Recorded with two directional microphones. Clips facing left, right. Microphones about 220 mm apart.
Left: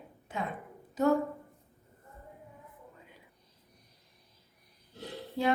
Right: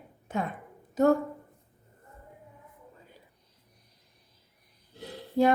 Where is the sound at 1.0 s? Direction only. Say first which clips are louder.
Right 5 dB; 45° right (ahead or behind).